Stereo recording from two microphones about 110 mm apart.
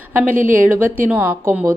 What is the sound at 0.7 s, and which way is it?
Speech, 15° right (ahead or behind).